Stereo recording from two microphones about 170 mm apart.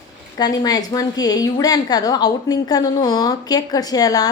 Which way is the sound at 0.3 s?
25° left (ahead or behind).